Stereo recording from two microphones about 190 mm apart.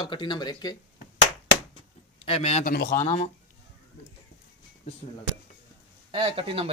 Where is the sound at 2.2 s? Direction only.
30° left (ahead or behind).